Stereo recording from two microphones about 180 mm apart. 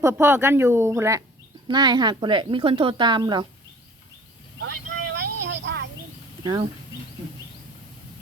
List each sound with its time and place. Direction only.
0.0 s speech: 15° right (ahead or behind)
4.6 s vehicle: 80° right
6.4 s speech: 25° right (ahead or behind)